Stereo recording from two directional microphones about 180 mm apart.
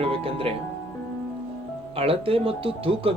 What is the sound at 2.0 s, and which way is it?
Speech, 30° right (ahead or behind).